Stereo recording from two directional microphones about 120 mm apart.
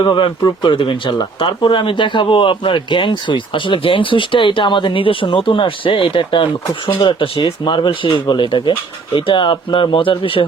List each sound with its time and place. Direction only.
0.0 s speech: 40° left (ahead or behind)